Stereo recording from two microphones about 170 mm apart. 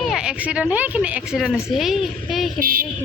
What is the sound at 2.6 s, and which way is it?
Speech, 55° right (ahead or behind).